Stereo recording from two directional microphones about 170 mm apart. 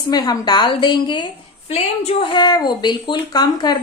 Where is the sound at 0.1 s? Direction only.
25° left (ahead or behind).